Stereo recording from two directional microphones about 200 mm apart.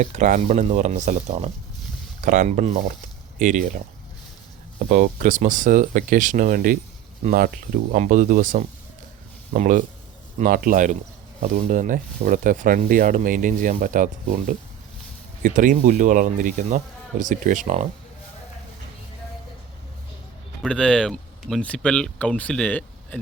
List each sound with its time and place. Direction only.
0.0 s speech: 35° right (ahead or behind)
4.9 s speech: 40° right (ahead or behind)
20.6 s speech: 5° left (ahead or behind)